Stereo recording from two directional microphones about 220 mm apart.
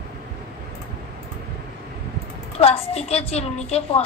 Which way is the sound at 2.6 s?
25° left (ahead or behind).